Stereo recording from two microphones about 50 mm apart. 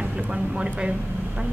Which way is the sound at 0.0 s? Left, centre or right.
Right.